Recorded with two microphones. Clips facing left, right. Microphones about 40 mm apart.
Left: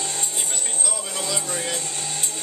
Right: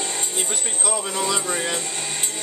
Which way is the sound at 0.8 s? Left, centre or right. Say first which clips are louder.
Right 8 dB; right.